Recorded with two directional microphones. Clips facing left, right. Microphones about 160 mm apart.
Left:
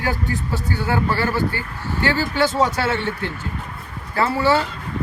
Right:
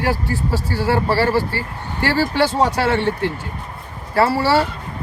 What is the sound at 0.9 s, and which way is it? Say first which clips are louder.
Speech: right 5 dB; 35° right (ahead or behind).